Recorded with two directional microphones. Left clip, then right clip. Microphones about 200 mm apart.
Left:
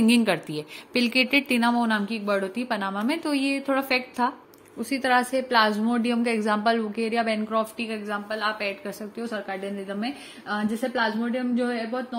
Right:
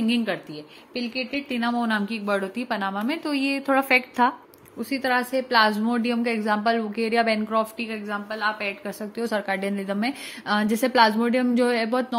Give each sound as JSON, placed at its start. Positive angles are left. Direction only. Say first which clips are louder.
{"t": 0.0, "sound": "speech", "louder": "left 4 dB", "side_deg": 20}
{"t": 0.9, "sound": "speech", "louder": "left 7 dB", "side_deg": 40}
{"t": 1.8, "sound": "a woman's voice", "louder": "even", "side_deg": 0}
{"t": 4.7, "sound": "a woman's voice", "louder": "left 1 dB", "side_deg": 0}
{"t": 9.2, "sound": "a woman's voice", "louder": "right 6 dB", "side_deg": -40}